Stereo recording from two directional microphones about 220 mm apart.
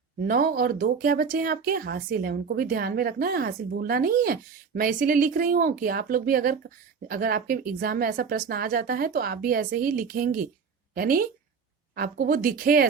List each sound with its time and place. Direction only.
0.3 s speech: 40° right (ahead or behind)